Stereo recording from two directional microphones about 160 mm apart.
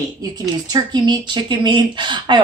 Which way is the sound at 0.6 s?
25° right (ahead or behind).